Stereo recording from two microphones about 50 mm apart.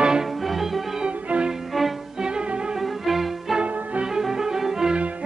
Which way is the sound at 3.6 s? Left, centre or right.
Right.